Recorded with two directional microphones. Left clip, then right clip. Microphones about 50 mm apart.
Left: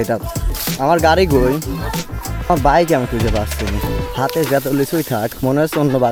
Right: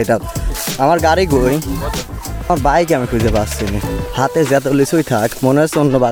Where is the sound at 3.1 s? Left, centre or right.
Centre.